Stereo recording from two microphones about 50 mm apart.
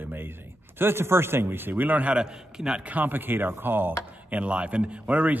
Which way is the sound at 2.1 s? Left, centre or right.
Centre.